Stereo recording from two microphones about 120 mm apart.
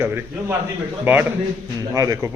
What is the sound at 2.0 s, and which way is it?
Speech, 30° right (ahead or behind).